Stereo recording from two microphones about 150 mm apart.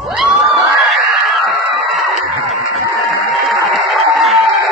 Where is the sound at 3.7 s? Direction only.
Centre (ahead or behind).